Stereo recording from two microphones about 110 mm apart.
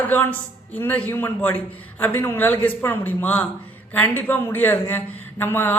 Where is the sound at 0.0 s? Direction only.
15° left (ahead or behind).